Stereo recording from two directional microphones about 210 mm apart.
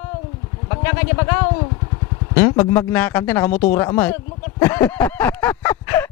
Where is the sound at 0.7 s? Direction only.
15° left (ahead or behind).